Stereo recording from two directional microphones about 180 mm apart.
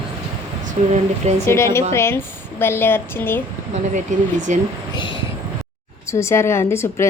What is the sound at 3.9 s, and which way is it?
Speech, 40° right (ahead or behind).